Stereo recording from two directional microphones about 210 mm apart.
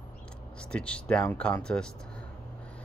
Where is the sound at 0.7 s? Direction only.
5° left (ahead or behind).